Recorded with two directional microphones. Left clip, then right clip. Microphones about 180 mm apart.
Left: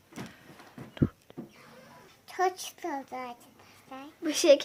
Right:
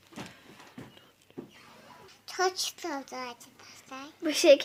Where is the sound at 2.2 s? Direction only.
5° left (ahead or behind).